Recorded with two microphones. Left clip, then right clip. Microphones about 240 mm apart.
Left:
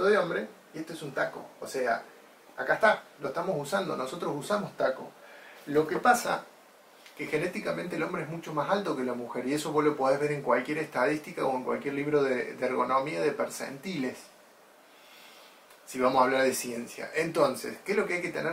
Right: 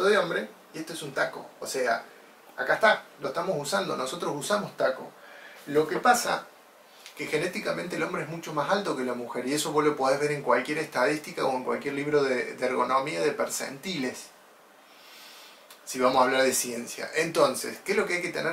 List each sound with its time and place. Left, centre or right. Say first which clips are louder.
0.2 s speech: right 2 dB; centre
3.3 s speech: right 2 dB; centre
5.7 s speech: right 2 dB; centre
10.5 s speech: right 3 dB; centre
16.2 s speech: right 1 dB; centre